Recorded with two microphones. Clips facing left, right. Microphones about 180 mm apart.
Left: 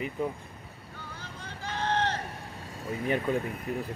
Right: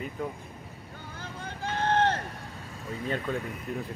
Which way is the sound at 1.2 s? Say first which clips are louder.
Right 6 dB; 55° right (ahead or behind).